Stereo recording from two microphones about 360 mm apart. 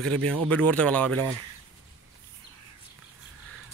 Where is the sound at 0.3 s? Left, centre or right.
Centre.